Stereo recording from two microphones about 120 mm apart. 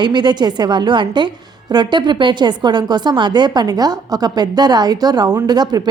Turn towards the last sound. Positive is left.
turn(degrees=-35)  # may be behind; listen again after turning